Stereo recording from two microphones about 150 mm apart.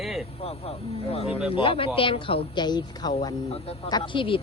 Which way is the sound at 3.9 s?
30° left (ahead or behind).